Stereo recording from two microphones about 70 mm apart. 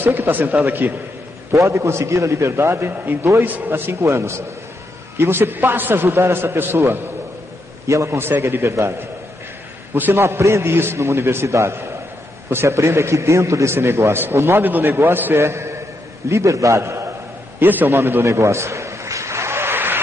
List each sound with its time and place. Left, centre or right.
0.0 s speech: right
1.5 s a man's voice: right
7.8 s a man's voice: right
9.9 s a man's voice: right
17.6 s speech: right
17.9 s a sound: right